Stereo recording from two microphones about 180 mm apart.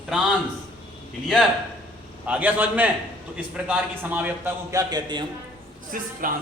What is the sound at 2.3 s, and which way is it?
A man's voice, 10° right (ahead or behind).